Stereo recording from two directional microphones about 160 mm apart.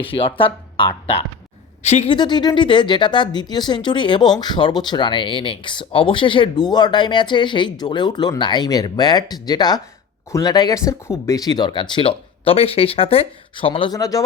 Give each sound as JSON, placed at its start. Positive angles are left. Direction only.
{"t": 0.0, "sound": "a woman's voice", "side_deg": 35}
{"t": 2.1, "sound": "speech", "side_deg": 30}
{"t": 13.9, "sound": "speech", "side_deg": 20}